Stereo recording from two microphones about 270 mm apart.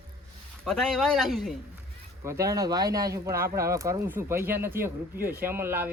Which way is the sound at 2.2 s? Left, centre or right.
Centre.